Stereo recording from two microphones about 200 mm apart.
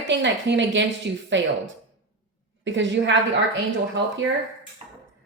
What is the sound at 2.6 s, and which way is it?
Speech, 65° right (ahead or behind).